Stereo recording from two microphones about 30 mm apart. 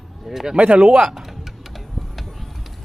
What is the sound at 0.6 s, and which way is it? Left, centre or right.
Speech, right.